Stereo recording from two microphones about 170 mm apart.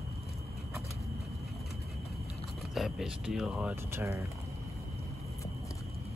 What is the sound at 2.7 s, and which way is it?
Speech, centre (ahead or behind).